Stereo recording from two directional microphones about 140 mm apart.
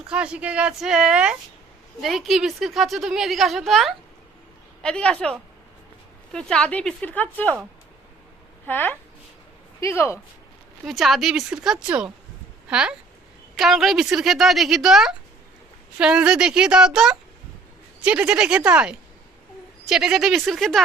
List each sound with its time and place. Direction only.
0.1 s a woman's voice: 5° right (ahead or behind); by 7.6 s 10° left (ahead or behind)
8.6 s a woman's voice: 15° left (ahead or behind)
10.8 s a woman's voice: centre (ahead or behind)